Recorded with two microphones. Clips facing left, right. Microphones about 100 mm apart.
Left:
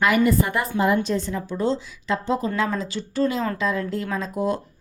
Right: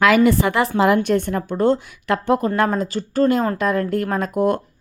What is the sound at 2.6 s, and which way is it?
A woman's voice, 50° right (ahead or behind).